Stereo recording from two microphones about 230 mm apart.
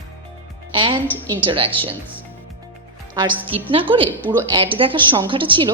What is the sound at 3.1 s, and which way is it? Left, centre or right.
Speech, centre.